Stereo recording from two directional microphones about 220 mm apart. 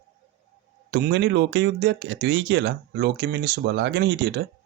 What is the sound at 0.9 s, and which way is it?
Speech, 50° right (ahead or behind).